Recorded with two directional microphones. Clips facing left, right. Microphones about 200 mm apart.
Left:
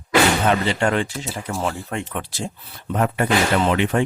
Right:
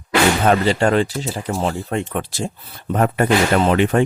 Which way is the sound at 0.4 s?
40° right (ahead or behind).